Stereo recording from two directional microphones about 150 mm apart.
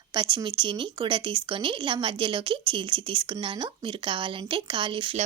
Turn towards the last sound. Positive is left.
turn(degrees=-35)  # may be behind; listen again after turning